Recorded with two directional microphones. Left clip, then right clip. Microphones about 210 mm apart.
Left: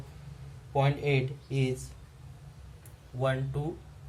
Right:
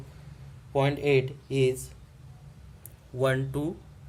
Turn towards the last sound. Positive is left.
turn(degrees=-50)  # may be behind; listen again after turning